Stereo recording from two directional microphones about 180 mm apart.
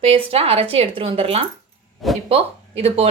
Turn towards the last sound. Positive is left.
turn(degrees=-35)  # may be behind; listen again after turning